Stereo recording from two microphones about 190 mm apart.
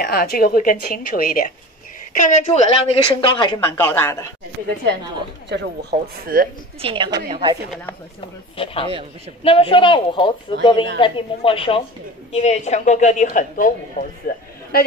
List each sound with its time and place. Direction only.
0.0 s a woman's voice: 55° left (ahead or behind); by 3.6 s 25° left (ahead or behind)
4.0 s a man's voice: 15° left (ahead or behind)
5.5 s speech: 60° right (ahead or behind)
6.8 s a woman's voice: 25° right (ahead or behind)
8.6 s a woman's voice: 30° left (ahead or behind); by 14.8 s 45° left (ahead or behind)